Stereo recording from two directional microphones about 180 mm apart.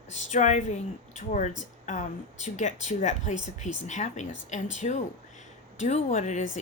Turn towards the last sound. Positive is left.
turn(degrees=45)  # may be behind; listen again after turning